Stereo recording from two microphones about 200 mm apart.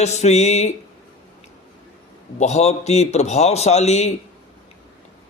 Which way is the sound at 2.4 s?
35° left (ahead or behind).